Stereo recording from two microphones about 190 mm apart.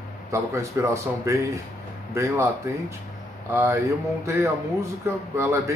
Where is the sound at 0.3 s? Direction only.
15° right (ahead or behind).